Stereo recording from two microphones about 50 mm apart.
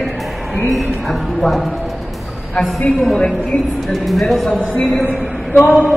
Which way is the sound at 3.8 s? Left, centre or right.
Centre.